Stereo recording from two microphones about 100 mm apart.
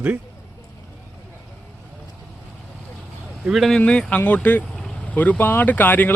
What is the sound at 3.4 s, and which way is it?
Speech, centre (ahead or behind).